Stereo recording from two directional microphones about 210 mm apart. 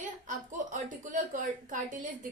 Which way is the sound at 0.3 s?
35° right (ahead or behind).